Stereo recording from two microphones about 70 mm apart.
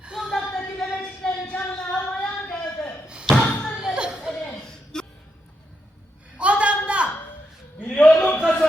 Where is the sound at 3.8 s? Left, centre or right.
Centre.